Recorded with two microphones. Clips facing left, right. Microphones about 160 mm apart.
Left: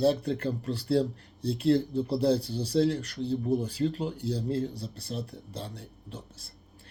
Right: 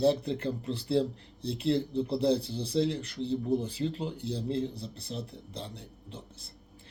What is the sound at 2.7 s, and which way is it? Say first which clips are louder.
Speech: left 3 dB; 45° left (ahead or behind).